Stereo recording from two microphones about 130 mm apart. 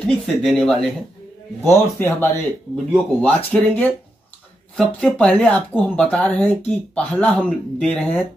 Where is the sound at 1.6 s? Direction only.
20° left (ahead or behind).